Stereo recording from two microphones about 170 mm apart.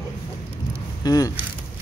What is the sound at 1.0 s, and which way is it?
Speech, 20° left (ahead or behind).